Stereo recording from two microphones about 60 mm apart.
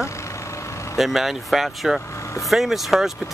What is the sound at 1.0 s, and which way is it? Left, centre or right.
Speech, centre.